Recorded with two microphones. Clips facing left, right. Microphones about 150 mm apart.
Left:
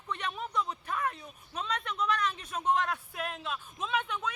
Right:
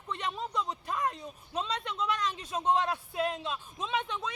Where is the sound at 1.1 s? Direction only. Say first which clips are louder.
Right 2 dB; 30° right (ahead or behind).